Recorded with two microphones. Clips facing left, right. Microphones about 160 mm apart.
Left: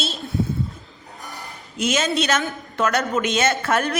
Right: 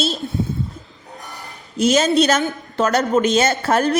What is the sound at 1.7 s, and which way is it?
A woman's voice, 35° right (ahead or behind).